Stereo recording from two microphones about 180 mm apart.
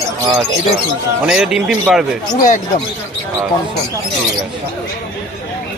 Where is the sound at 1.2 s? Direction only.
5° right (ahead or behind).